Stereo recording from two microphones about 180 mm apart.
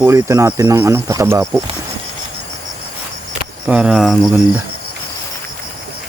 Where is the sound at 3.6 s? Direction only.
5° right (ahead or behind).